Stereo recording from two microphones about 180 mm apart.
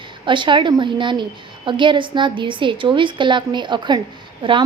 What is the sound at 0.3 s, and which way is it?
A woman's voice, 25° right (ahead or behind).